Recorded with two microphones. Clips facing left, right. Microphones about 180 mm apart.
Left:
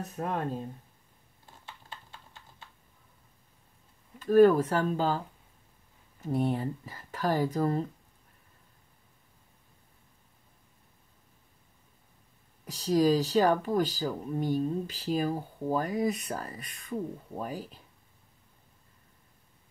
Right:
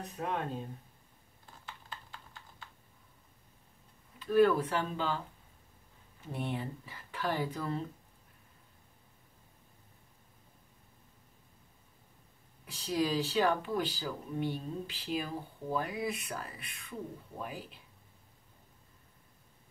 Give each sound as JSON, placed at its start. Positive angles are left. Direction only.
{"t": 0.0, "sound": "speech", "side_deg": 45}
{"t": 1.4, "sound": "typing", "side_deg": 25}
{"t": 4.2, "sound": "speech", "side_deg": 45}
{"t": 6.2, "sound": "speech", "side_deg": 40}
{"t": 12.6, "sound": "speech", "side_deg": 40}